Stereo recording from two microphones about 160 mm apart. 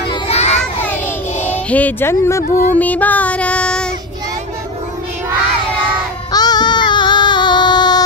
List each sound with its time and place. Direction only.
0.1 s children playing: 40° left (ahead or behind)
1.4 s speech: 10° left (ahead or behind)
2.4 s music: 60° left (ahead or behind)
2.7 s female singing: 10° left (ahead or behind)
6.3 s child singing: 25° left (ahead or behind)